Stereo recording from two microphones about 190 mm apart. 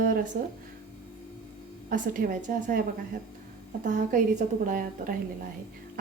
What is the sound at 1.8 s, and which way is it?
Speech, 45° right (ahead or behind).